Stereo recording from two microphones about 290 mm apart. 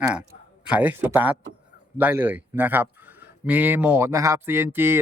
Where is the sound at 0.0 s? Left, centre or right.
Centre.